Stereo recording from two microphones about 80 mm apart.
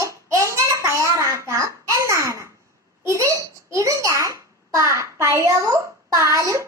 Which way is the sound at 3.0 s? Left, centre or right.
Right.